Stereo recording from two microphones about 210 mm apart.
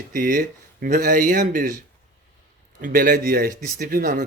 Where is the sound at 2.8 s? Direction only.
40° right (ahead or behind).